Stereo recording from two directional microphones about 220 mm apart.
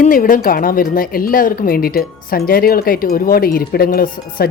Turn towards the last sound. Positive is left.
turn(degrees=40)  # may be behind; listen again after turning